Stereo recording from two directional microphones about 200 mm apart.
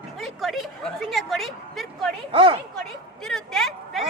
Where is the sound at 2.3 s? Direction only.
25° right (ahead or behind).